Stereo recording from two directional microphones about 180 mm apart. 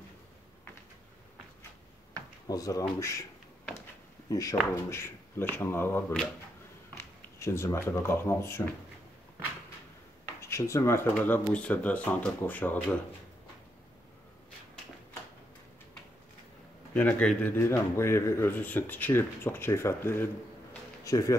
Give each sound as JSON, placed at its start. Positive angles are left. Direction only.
{"t": 2.4, "sound": "a man's voice", "side_deg": 20}
{"t": 4.3, "sound": "a man's voice", "side_deg": 20}
{"t": 7.3, "sound": "a man's voice", "side_deg": 15}
{"t": 10.4, "sound": "a man's voice", "side_deg": 15}
{"t": 16.9, "sound": "a man's voice", "side_deg": 5}